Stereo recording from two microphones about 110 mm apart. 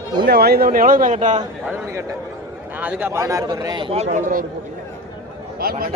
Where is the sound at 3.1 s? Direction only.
25° right (ahead or behind).